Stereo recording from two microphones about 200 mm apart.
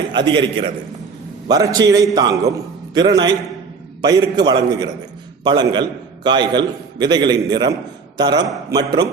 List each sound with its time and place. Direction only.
0.1 s a man's voice: 25° right (ahead or behind)